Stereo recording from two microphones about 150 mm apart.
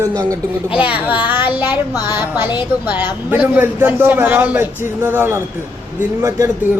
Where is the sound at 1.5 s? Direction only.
10° right (ahead or behind).